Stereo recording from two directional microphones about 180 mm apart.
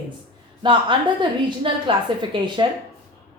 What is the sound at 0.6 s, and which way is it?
A woman's voice, 25° right (ahead or behind).